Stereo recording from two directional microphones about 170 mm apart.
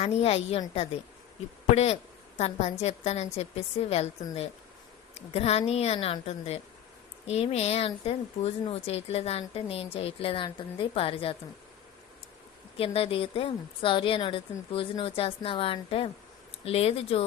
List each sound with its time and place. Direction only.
0.0 s speech: 35° left (ahead or behind)
5.1 s speech: 40° left (ahead or behind)
12.7 s speech: 35° left (ahead or behind)